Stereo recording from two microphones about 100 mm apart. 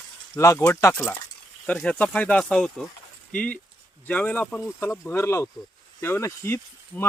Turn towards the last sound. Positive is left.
turn(degrees=20)  # may be behind; listen again after turning